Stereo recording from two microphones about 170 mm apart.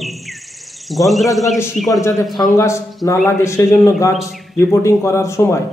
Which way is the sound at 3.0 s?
15° left (ahead or behind).